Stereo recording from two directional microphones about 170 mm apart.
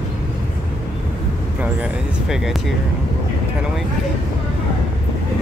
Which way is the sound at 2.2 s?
5° right (ahead or behind).